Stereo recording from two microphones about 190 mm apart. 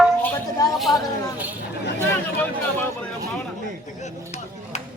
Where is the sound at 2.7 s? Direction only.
5° left (ahead or behind).